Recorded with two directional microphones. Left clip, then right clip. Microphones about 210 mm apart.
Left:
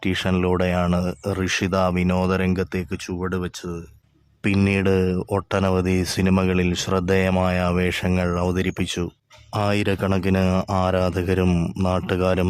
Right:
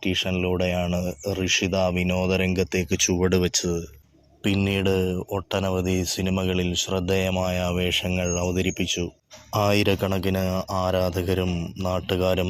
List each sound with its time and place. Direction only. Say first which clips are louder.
0.0 s speech: left 2 dB; 25° left (ahead or behind)
2.9 s speech: right 6 dB; centre (ahead or behind)
4.7 s speech: left 3 dB; 20° left (ahead or behind)
10.6 s speech: left 3 dB; 40° left (ahead or behind)
10.8 s speech: even; 20° left (ahead or behind)
11.4 s a man's voice: left 6 dB; 70° left (ahead or behind)
11.8 s speech: left 1 dB; 25° left (ahead or behind)